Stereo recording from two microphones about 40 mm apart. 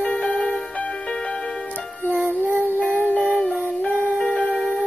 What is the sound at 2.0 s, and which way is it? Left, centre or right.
Music, left.